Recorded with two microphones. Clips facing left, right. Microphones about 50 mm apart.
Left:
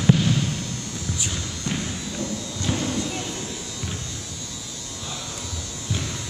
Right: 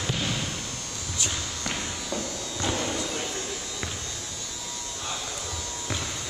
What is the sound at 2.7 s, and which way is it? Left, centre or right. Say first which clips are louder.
Music: left 3 dB; right.